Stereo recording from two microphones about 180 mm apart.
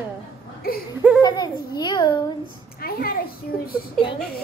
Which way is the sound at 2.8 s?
55° left (ahead or behind).